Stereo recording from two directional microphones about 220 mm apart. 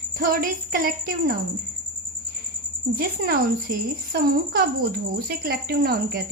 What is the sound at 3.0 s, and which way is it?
Speech, 45° right (ahead or behind).